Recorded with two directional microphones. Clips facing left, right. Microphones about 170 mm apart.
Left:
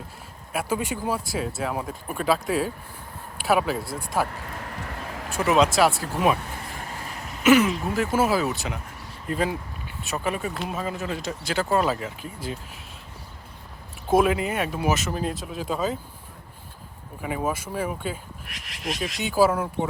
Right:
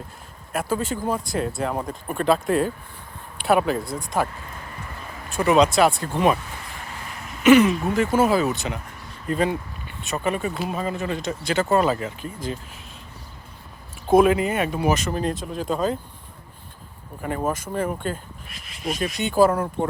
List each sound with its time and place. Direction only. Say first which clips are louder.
0.5 s speech: right 2 dB; 10° left (ahead or behind)
4.7 s vehicle: left 3 dB; 70° left (ahead or behind)
5.4 s speech: right 3 dB; 5° left (ahead or behind)
6.6 s a sound: left 2 dB; 45° left (ahead or behind)
7.4 s speech: right 4 dB; centre (ahead or behind)
14.1 s speech: right 4 dB; centre (ahead or behind)
17.2 s speech: right 2 dB; 5° left (ahead or behind)
18.4 s speech: even; 80° left
19.2 s speech: right 2 dB; 5° left (ahead or behind)